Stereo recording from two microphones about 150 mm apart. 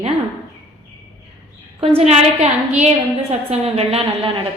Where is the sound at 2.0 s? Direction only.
45° right (ahead or behind).